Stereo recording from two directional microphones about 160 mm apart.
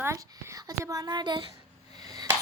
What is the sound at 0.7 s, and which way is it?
Speech, 20° right (ahead or behind).